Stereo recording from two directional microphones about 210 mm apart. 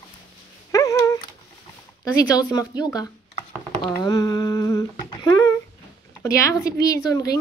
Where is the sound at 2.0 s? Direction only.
15° left (ahead or behind).